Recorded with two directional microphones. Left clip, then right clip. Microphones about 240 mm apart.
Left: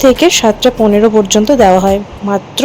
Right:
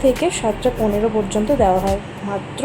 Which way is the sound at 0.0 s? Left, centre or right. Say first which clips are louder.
Left 10 dB; left.